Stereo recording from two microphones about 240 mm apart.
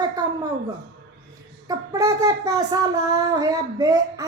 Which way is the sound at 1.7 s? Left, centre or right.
Centre.